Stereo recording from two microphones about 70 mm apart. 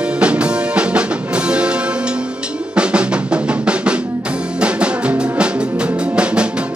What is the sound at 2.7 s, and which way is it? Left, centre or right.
Drum, centre.